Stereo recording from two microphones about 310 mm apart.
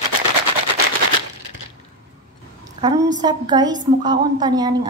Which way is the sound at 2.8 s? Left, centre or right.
Centre.